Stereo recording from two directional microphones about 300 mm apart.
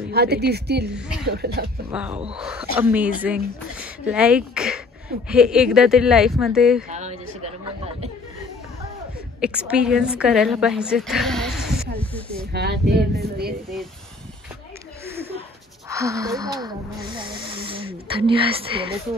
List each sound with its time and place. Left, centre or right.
0.1 s speech: right
0.9 s speech: centre
1.2 s speech: right
1.9 s a woman's voice: centre
6.9 s a sound: right
9.4 s a woman's voice: centre
12.5 s speech: right
15.0 s a sound: centre
15.9 s speech: centre